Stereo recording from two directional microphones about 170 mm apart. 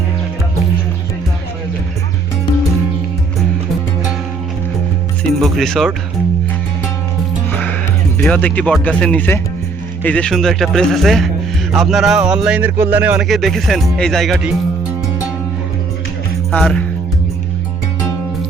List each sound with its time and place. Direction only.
5.4 s speech: centre (ahead or behind)
8.2 s speech: 5° left (ahead or behind); by 13.2 s 10° right (ahead or behind)
13.2 s speech: centre (ahead or behind)
16.5 s speech: 5° left (ahead or behind)